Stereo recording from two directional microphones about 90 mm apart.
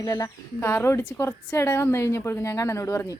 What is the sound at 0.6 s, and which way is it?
A woman's voice, 30° left (ahead or behind).